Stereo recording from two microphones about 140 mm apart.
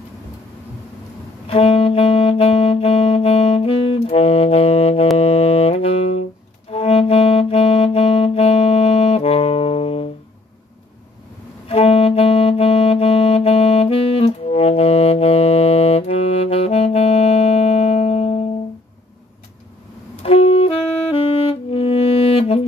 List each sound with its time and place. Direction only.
1.5 s saxophone: 40° left (ahead or behind)
5.1 s music: 45° left (ahead or behind)
6.7 s saxophone: 45° left (ahead or behind)
11.7 s music: 45° left (ahead or behind)
20.2 s saxophone: 45° left (ahead or behind)
21.2 s music: 40° left (ahead or behind)